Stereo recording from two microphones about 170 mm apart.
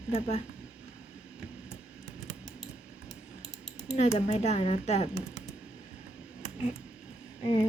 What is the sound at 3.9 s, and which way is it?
Speech, 40° left (ahead or behind).